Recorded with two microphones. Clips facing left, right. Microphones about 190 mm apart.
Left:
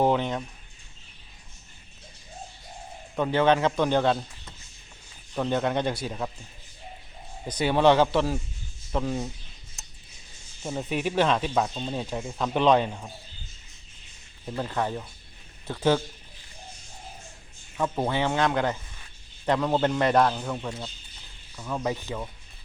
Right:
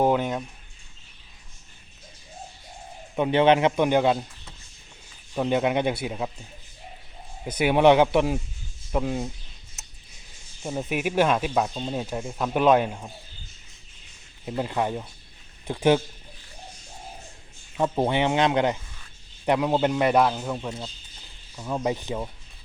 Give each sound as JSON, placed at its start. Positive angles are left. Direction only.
{"t": 0.0, "sound": "speech", "side_deg": -10}
{"t": 3.2, "sound": "speech", "side_deg": -20}
{"t": 5.3, "sound": "speech", "side_deg": -10}
{"t": 7.4, "sound": "speech", "side_deg": -10}
{"t": 10.6, "sound": "speech", "side_deg": -10}
{"t": 14.4, "sound": "speech", "side_deg": -15}
{"t": 17.7, "sound": "speech", "side_deg": -20}
{"t": 21.5, "sound": "speech", "side_deg": -20}